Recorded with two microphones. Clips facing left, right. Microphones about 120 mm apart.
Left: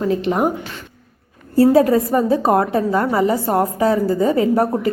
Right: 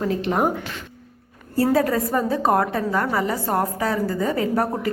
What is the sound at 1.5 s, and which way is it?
A woman's voice, 25° left (ahead or behind).